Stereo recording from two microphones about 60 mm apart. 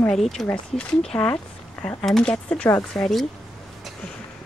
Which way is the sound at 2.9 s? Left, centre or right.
Left.